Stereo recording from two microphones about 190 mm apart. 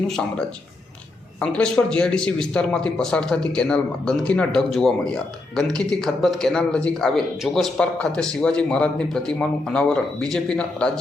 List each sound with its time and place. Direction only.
0.1 s a man's voice: 5° left (ahead or behind)